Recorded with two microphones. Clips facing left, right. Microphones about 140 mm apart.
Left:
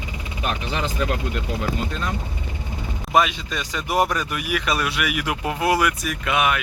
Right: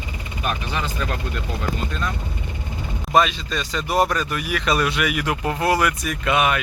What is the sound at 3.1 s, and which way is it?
Speech, 10° left (ahead or behind).